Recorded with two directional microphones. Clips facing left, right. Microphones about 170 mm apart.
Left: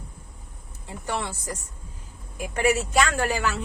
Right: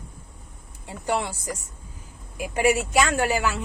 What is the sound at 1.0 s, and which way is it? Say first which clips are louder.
Speech: right 4 dB; 15° right (ahead or behind).